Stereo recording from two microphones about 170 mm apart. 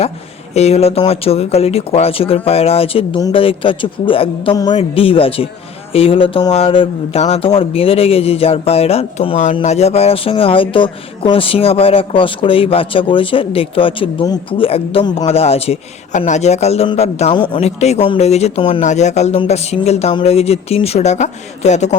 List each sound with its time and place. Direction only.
0.5 s speech: 40° left (ahead or behind)
17.3 s speech: 25° left (ahead or behind)
17.6 s speech: 40° left (ahead or behind)